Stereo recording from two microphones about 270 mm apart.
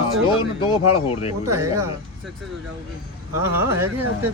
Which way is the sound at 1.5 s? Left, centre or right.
Centre.